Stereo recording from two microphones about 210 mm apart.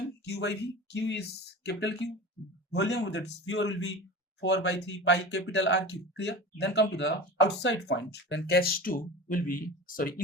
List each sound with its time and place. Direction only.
0.3 s a man's voice: 55° left (ahead or behind)